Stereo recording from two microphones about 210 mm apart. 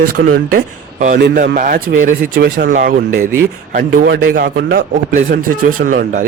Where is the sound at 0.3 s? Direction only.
40° right (ahead or behind).